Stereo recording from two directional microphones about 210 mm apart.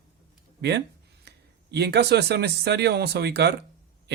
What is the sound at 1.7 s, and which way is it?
Speech, 50° right (ahead or behind).